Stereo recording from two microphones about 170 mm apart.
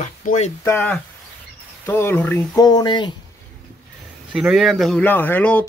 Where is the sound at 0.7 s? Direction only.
10° left (ahead or behind).